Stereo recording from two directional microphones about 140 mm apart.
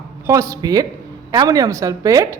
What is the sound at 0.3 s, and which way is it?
Speech, 20° right (ahead or behind).